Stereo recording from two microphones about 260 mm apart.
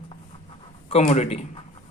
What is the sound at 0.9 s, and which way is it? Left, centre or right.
Speech, left.